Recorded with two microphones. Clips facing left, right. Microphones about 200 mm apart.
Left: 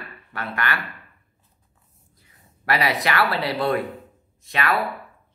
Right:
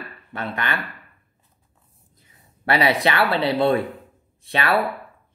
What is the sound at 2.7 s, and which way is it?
Speech, 25° right (ahead or behind).